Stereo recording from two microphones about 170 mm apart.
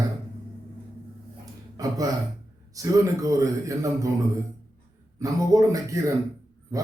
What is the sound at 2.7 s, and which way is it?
A man's voice, 20° right (ahead or behind).